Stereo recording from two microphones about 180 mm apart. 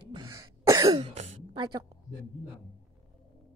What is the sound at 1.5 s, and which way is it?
Speech, 25° right (ahead or behind).